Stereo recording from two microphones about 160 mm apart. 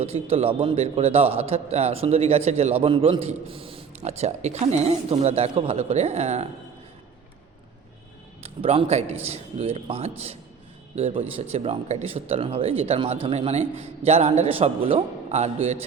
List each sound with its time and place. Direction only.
0.0 s speech: 40° right (ahead or behind)
8.4 s speech: 35° right (ahead or behind)